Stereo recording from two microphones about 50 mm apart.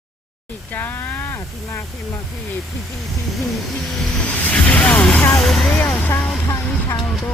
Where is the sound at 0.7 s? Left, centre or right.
Left.